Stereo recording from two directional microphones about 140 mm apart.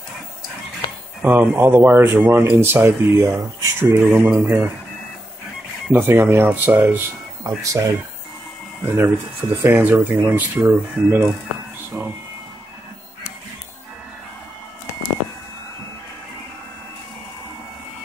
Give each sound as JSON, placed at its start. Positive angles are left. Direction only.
{"t": 1.2, "sound": "speech", "side_deg": -10}
{"t": 5.9, "sound": "speech", "side_deg": -15}